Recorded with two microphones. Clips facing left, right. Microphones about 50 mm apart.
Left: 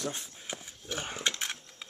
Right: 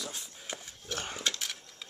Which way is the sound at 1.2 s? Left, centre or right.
Left.